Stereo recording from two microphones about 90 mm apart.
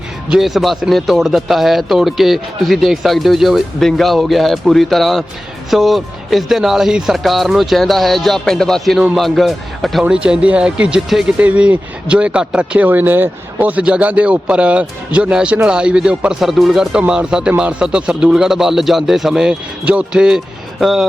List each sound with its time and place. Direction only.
0.3 s speech: centre (ahead or behind)
10.0 s speech: 10° right (ahead or behind)